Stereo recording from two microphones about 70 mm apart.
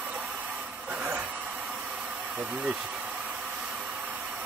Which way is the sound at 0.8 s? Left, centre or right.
Right.